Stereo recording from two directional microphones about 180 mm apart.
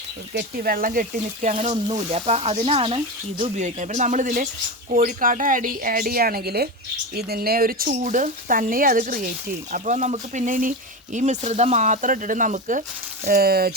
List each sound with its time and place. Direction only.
0.3 s speech: 55° right (ahead or behind)
1.5 s speech: 30° right (ahead or behind)
13.2 s speech: 60° right (ahead or behind)